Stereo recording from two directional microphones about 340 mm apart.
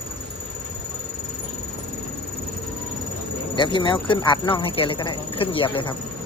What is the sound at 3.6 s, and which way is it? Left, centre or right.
Speech, centre.